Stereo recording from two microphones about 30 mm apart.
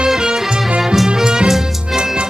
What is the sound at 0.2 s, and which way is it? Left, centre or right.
Music, right.